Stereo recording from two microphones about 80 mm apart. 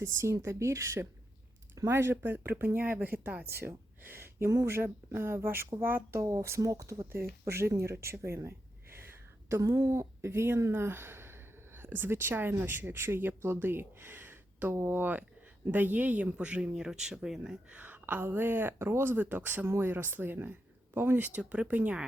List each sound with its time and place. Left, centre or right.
0.0 s speech: right
1.7 s a sound: right
2.0 s speech: right
7.1 s speech: right
8.4 s a sound: right
9.5 s speech: right
21.3 s speech: centre